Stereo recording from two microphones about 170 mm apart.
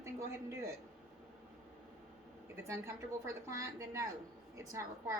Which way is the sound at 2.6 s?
15° right (ahead or behind).